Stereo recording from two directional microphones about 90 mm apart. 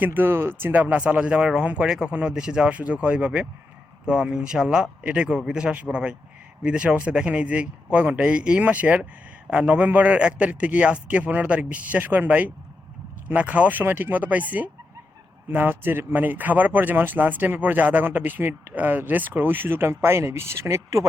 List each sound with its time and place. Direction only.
0.0 s speech: 20° right (ahead or behind)